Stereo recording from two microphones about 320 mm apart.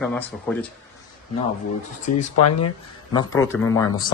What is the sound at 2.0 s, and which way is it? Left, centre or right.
Speech, left.